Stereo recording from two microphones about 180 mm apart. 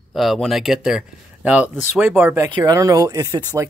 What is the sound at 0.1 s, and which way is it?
Speech, centre (ahead or behind).